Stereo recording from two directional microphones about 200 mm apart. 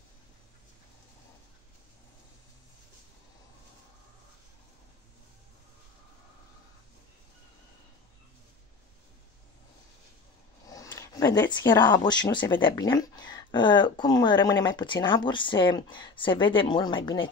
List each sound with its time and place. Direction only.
10.7 s speech: 15° left (ahead or behind)